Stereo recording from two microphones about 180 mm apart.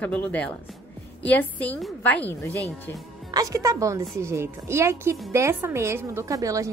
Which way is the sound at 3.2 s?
20° right (ahead or behind).